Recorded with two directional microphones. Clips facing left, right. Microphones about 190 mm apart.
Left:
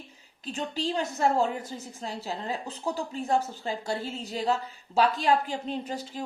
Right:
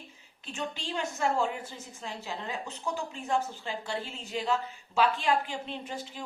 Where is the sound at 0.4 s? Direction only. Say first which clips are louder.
Left 6 dB; 35° left (ahead or behind).